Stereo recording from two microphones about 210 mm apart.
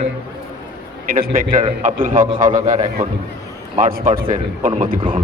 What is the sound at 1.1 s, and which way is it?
Speech, 40° right (ahead or behind).